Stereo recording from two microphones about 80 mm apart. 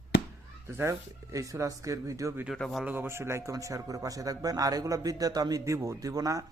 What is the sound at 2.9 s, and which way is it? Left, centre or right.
Speech, right.